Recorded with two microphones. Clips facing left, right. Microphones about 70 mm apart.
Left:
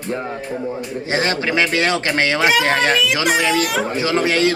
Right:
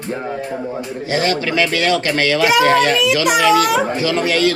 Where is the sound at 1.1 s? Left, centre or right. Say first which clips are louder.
Right 1 dB; left.